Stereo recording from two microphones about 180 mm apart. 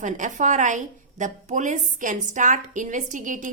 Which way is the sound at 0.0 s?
45° right (ahead or behind).